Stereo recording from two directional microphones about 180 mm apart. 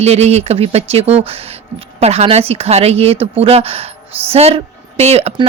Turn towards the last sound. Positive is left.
turn(degrees=-35)  # may be behind; listen again after turning